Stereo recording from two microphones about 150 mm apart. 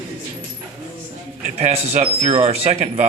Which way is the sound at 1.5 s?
45° right (ahead or behind).